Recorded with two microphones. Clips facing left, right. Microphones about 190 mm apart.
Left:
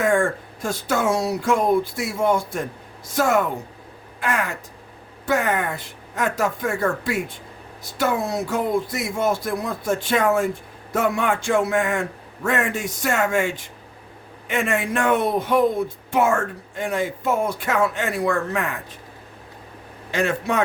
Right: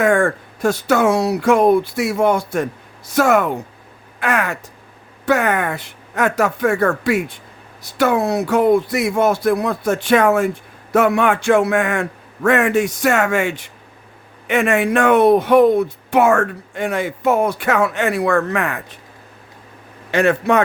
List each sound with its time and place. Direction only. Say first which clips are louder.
0.0 s speech: right 4 dB; 65° right (ahead or behind)
20.1 s a man's voice: right 7 dB; 65° right (ahead or behind)